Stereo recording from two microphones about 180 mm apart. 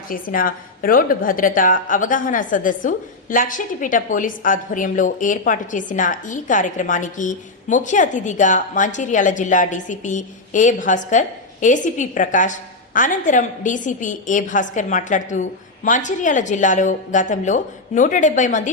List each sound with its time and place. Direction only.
0.1 s a woman's voice: 50° left (ahead or behind)